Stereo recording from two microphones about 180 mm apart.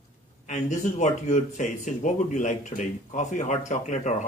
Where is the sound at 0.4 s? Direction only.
40° left (ahead or behind).